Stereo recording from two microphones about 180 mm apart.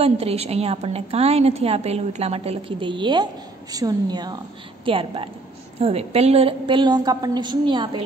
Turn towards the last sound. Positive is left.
turn(degrees=-25)  # may be behind; listen again after turning